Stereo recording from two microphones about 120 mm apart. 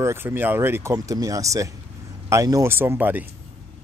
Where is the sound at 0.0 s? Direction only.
20° right (ahead or behind).